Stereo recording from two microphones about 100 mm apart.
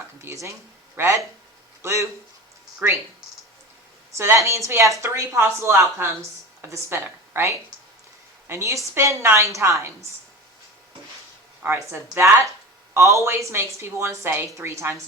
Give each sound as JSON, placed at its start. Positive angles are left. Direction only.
{"t": 0.2, "sound": "a woman's voice", "side_deg": -30}
{"t": 4.2, "sound": "a woman's voice", "side_deg": -25}
{"t": 11.6, "sound": "a woman's voice", "side_deg": -25}